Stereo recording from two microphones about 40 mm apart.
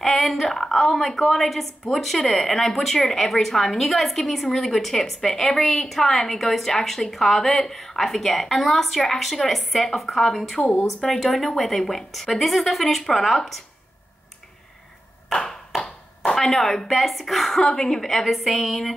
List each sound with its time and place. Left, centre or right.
0.0 s a woman's voice: centre
10.6 s speech: left
11.1 s a woman's voice: centre
16.3 s a woman's voice: centre